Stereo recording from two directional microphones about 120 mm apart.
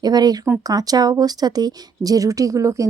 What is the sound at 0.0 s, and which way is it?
A woman's voice, 35° right (ahead or behind).